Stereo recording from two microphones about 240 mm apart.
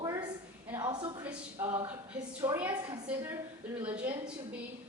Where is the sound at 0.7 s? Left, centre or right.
Centre.